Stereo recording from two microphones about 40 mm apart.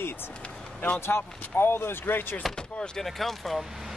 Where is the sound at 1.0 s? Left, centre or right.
Left.